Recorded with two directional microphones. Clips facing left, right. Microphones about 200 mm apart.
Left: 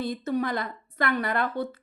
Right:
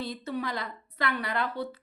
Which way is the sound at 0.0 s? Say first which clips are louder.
Left 6 dB; 45° left (ahead or behind).